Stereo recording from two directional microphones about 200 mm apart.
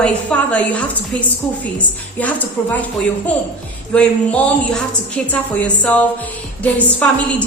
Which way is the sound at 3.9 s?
5° left (ahead or behind).